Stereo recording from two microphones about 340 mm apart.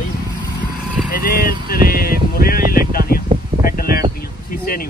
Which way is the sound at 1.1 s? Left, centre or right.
Left.